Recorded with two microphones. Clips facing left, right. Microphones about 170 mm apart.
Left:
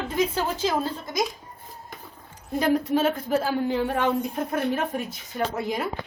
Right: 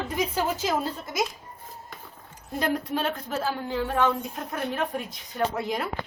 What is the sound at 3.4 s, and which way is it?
Speech, 15° left (ahead or behind).